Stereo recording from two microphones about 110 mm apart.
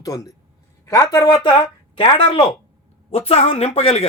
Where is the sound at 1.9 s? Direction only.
50° left (ahead or behind).